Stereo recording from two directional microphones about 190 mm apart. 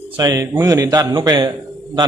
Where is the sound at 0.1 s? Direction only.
20° right (ahead or behind).